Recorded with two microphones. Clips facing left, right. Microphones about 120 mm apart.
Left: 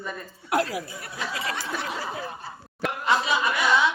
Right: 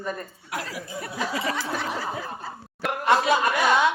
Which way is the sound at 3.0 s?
55° right (ahead or behind).